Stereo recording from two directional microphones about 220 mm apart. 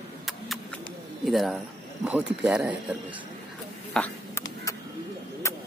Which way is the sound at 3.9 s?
10° left (ahead or behind).